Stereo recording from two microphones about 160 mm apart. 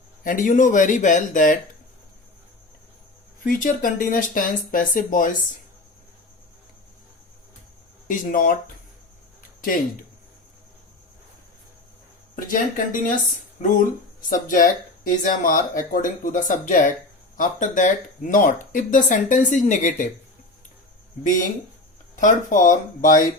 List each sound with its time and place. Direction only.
0.3 s speech: 55° left (ahead or behind)
3.4 s speech: 60° left (ahead or behind)
8.0 s speech: 55° left (ahead or behind)
12.5 s speech: 60° left (ahead or behind)
14.2 s speech: 55° left (ahead or behind)
22.2 s speech: 55° left (ahead or behind)